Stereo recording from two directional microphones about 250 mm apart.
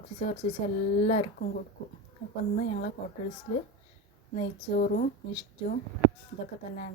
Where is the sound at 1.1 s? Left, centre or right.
Left.